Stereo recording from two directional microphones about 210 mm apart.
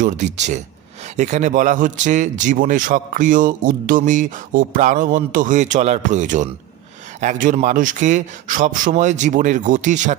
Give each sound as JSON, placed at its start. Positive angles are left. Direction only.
{"t": 0.0, "sound": "a man's voice", "side_deg": -35}